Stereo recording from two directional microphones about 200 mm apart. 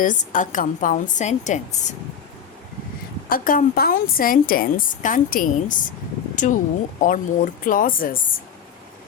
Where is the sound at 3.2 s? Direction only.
45° left (ahead or behind).